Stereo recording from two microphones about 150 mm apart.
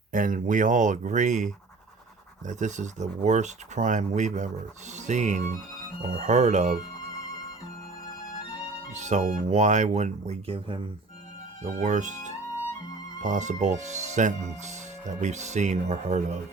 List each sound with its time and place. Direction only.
0.1 s speech: 60° right (ahead or behind)
8.9 s speech: 50° right (ahead or behind)
11.6 s speech: 60° right (ahead or behind)
13.2 s speech: 55° right (ahead or behind)